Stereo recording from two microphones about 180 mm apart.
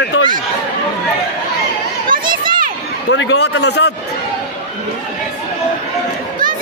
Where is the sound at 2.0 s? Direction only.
50° right (ahead or behind).